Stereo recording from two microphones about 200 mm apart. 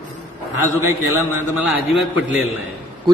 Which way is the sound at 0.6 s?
10° right (ahead or behind).